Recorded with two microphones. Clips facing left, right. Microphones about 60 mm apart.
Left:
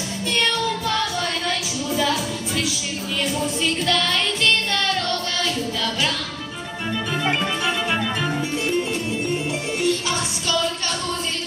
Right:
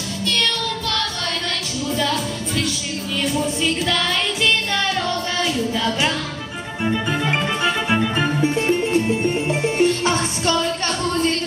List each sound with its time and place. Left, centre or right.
0.3 s music: centre
2.0 s music: centre
7.1 s music: right